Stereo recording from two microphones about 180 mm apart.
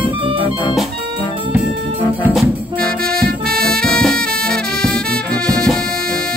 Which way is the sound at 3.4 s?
5° left (ahead or behind).